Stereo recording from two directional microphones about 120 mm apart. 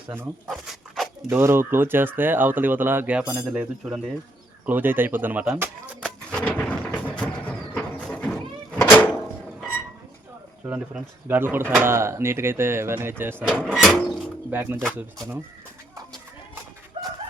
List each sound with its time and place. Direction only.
0.4 s speech: centre (ahead or behind)
1.3 s speech: 20° right (ahead or behind)
6.4 s a sound: 10° left (ahead or behind)
10.7 s speech: 15° right (ahead or behind)
14.5 s speech: 15° right (ahead or behind)
16.9 s chicken: 50° right (ahead or behind)